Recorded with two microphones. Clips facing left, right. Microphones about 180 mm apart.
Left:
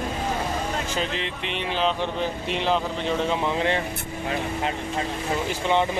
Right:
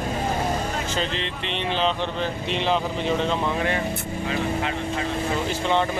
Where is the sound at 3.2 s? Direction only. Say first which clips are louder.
Even; 15° left (ahead or behind).